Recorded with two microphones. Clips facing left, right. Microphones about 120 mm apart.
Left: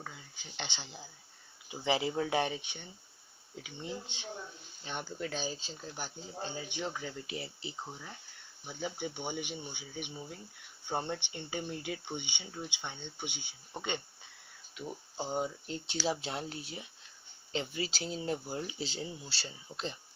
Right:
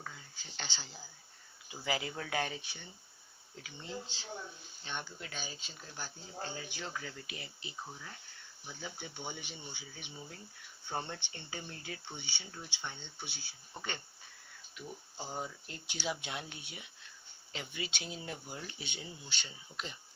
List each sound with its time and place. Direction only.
0.0 s speech: 15° left (ahead or behind)
5.2 s speech: 35° left (ahead or behind)